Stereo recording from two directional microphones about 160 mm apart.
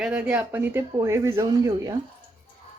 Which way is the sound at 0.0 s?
10° right (ahead or behind).